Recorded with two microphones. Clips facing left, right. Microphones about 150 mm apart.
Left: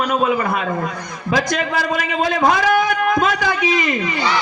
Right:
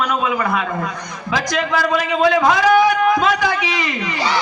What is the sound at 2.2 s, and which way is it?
A man's voice, 50° left (ahead or behind).